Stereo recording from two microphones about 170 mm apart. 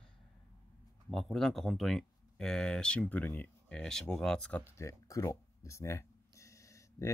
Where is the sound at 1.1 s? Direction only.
Centre (ahead or behind).